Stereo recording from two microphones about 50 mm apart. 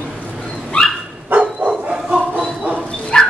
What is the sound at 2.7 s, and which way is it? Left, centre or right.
Dog, centre.